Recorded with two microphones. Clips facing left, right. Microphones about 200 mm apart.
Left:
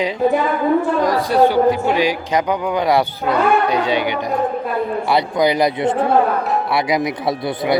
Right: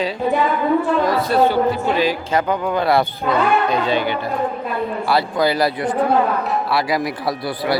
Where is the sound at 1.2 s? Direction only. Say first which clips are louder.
Left 2 dB; 15° left (ahead or behind).